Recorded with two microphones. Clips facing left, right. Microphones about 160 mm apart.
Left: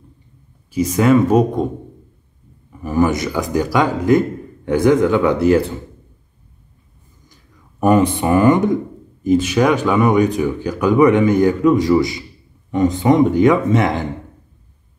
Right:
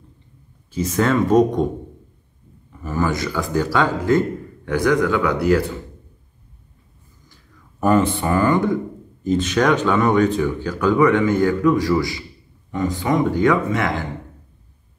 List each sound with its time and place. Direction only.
0.7 s speech: 10° left (ahead or behind)
2.8 s speech: 15° left (ahead or behind)
7.8 s speech: 15° left (ahead or behind)